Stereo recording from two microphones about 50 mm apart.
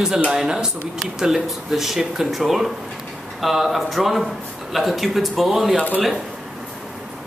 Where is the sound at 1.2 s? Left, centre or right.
Centre.